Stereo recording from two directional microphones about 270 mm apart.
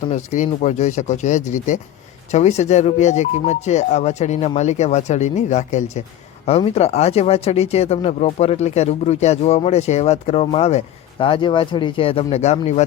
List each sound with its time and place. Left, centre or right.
0.3 s speech: left